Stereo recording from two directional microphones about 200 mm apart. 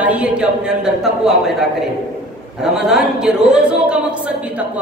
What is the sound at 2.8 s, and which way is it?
A woman's voice, 5° right (ahead or behind).